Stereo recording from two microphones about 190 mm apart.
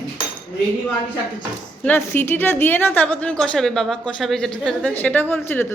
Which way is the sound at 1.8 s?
10° left (ahead or behind).